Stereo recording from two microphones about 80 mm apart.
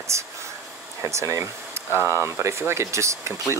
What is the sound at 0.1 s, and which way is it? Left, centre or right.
Speech, right.